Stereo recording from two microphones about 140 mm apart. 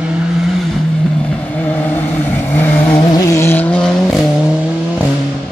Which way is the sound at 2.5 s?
10° left (ahead or behind).